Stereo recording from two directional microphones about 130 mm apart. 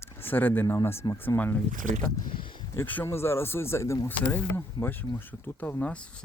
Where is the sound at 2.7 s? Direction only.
15° left (ahead or behind).